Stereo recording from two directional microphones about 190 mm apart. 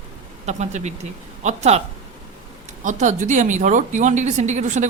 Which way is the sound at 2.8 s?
40° right (ahead or behind).